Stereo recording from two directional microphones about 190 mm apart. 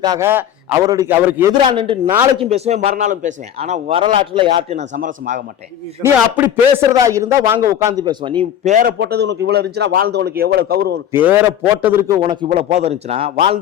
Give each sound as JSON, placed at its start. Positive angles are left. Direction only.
{"t": 0.0, "sound": "a man's voice", "side_deg": -15}
{"t": 1.6, "sound": "a man's voice", "side_deg": -30}
{"t": 4.9, "sound": "a man's voice", "side_deg": -40}
{"t": 6.0, "sound": "a man's voice", "side_deg": -10}
{"t": 9.0, "sound": "speech", "side_deg": -60}
{"t": 11.1, "sound": "a man's voice", "side_deg": -10}